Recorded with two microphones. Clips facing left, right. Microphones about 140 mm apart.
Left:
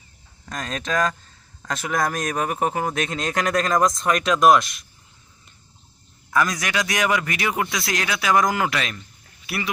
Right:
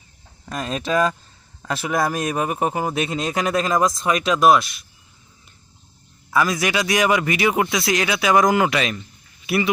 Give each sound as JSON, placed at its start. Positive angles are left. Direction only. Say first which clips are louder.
{"t": 0.4, "sound": "a man's voice", "louder": "right 4 dB", "side_deg": -10}
{"t": 6.3, "sound": "a man's voice", "louder": "right 3 dB", "side_deg": -5}
{"t": 7.9, "sound": "speech", "louder": "right 6 dB", "side_deg": -5}
{"t": 8.1, "sound": "a man's voice", "louder": "right 3 dB", "side_deg": -20}